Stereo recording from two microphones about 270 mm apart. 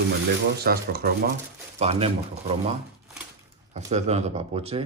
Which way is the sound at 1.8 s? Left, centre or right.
Right.